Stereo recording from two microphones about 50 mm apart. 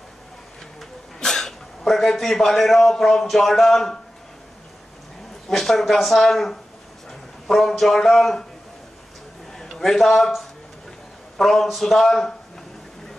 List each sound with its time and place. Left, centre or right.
0.7 s a man's voice: centre
5.5 s a man's voice: centre
9.5 s a man's voice: centre